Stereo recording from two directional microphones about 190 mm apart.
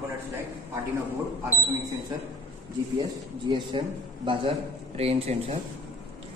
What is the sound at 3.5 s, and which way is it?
A man's voice, 25° right (ahead or behind).